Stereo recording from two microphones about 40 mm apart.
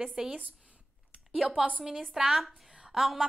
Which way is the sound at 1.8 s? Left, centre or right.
Centre.